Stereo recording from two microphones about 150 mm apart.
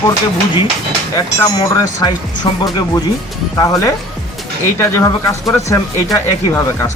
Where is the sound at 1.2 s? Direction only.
25° left (ahead or behind).